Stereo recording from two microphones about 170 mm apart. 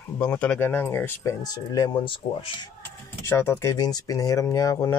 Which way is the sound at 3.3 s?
15° left (ahead or behind).